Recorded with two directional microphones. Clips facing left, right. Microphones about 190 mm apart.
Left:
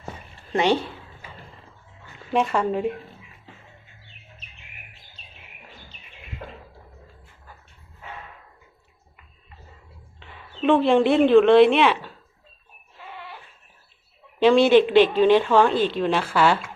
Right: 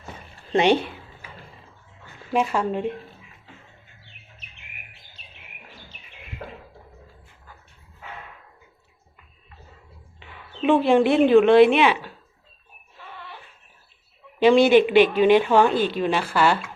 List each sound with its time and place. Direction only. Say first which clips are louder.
0.5 s speech: right 2 dB; 20° right (ahead or behind)
2.3 s speech: left 1 dB; centre (ahead or behind)
10.2 s speech: even; 5° right (ahead or behind)
14.3 s speech: even; 10° right (ahead or behind)